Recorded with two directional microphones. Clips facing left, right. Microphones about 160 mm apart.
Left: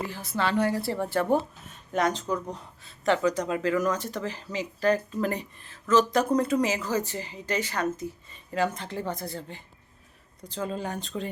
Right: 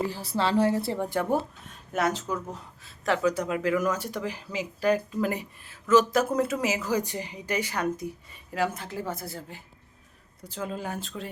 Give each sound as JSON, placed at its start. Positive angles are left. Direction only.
{"t": 0.0, "sound": "a woman's voice", "side_deg": -35}
{"t": 1.6, "sound": "a woman's voice", "side_deg": -5}